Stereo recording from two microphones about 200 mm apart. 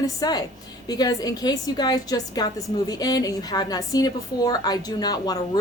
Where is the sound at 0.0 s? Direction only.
20° left (ahead or behind).